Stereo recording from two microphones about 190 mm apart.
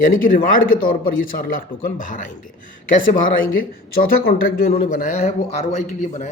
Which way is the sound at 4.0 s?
50° left (ahead or behind).